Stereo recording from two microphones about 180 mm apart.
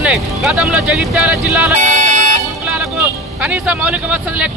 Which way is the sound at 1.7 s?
45° right (ahead or behind).